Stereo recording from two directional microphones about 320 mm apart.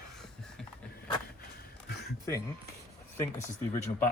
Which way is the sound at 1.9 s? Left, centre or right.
Left.